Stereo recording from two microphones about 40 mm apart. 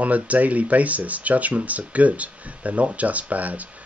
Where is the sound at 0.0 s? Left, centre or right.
Right.